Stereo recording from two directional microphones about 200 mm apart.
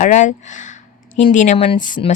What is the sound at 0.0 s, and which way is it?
Speech, 40° left (ahead or behind).